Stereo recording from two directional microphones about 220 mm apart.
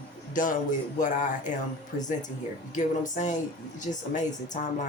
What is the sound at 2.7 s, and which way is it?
Speech, 35° left (ahead or behind).